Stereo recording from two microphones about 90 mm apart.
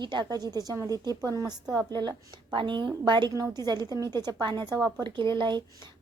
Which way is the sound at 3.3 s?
40° right (ahead or behind).